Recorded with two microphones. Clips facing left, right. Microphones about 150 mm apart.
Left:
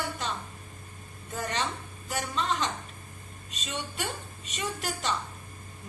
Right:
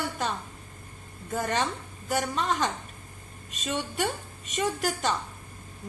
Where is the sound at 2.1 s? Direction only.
50° right (ahead or behind).